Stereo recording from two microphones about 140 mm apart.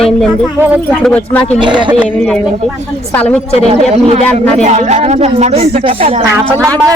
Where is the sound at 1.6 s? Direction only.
35° right (ahead or behind).